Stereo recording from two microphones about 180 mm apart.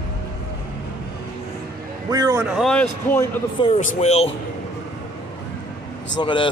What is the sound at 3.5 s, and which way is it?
Speech, 35° left (ahead or behind).